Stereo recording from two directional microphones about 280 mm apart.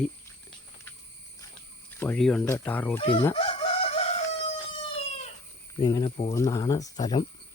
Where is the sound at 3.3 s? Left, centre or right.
Centre.